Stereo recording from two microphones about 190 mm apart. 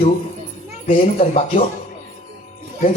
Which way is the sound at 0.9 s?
35° left (ahead or behind).